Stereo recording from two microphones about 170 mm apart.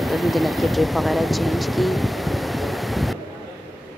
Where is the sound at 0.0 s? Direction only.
Centre (ahead or behind).